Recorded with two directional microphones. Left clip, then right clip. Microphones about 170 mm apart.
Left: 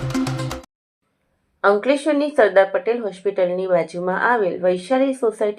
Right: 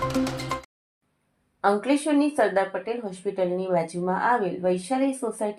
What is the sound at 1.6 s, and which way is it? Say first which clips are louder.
A woman's voice: left 6 dB; 25° left (ahead or behind).